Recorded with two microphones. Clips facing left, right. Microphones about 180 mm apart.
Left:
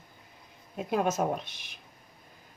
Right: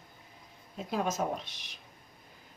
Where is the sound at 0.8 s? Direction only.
55° left (ahead or behind).